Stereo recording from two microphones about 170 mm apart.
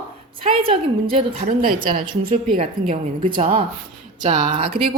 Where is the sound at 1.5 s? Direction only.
55° right (ahead or behind).